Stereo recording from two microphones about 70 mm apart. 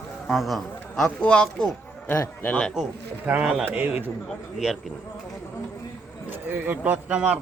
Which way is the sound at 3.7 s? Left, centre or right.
Right.